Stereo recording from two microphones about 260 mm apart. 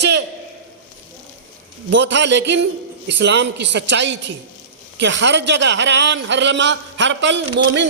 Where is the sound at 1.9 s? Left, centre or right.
Right.